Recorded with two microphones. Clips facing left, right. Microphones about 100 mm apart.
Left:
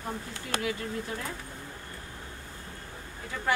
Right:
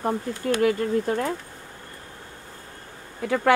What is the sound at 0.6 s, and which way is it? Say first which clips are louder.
Speech: right 10 dB; 50° right (ahead or behind).